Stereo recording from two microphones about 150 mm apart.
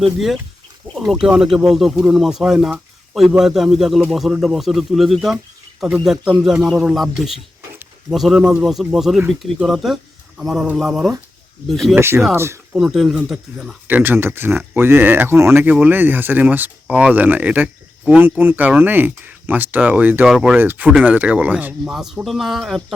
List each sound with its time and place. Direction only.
0.0 s speech: centre (ahead or behind)
11.9 s speech: 15° right (ahead or behind)
12.7 s speech: 5° right (ahead or behind)